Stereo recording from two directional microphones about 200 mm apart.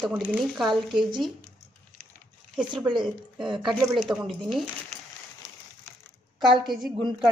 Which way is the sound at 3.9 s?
Centre (ahead or behind).